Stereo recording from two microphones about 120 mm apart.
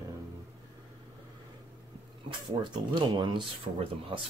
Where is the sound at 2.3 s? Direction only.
40° right (ahead or behind).